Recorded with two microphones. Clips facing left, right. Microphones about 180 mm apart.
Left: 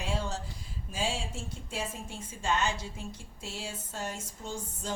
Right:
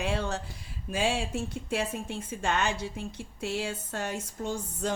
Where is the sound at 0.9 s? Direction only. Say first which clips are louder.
Right 6 dB; 65° right (ahead or behind).